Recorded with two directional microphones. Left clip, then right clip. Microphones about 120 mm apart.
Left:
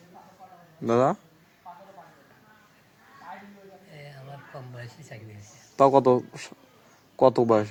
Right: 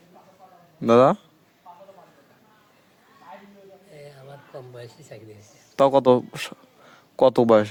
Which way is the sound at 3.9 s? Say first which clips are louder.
Right 2 dB; 20° right (ahead or behind).